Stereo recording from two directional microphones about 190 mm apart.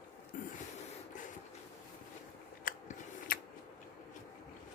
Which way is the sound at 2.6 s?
45° left (ahead or behind).